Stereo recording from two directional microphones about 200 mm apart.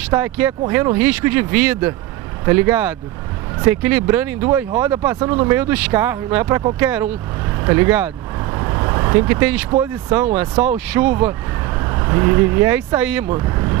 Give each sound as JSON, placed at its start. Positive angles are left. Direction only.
{"t": 0.1, "sound": "speech", "side_deg": -10}